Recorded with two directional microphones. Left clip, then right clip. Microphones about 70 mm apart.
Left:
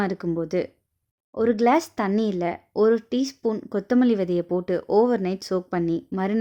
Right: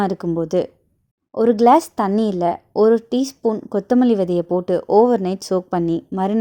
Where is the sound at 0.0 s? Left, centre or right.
Right.